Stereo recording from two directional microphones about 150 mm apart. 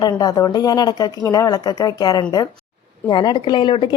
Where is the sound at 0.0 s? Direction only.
25° left (ahead or behind).